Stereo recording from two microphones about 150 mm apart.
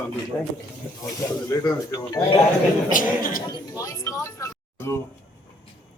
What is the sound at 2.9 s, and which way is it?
Speech, 65° left (ahead or behind).